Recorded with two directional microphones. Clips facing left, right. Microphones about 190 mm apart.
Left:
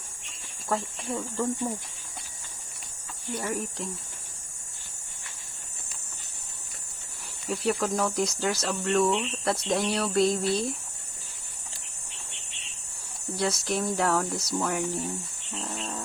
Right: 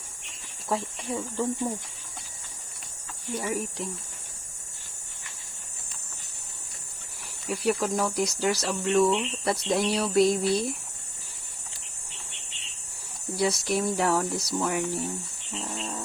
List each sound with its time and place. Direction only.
0.7 s speech: 10° right (ahead or behind)
3.3 s speech: 5° right (ahead or behind)
7.4 s speech: centre (ahead or behind)
13.3 s speech: 5° right (ahead or behind)